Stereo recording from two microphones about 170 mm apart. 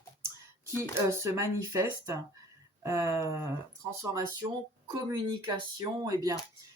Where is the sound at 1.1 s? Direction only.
15° right (ahead or behind).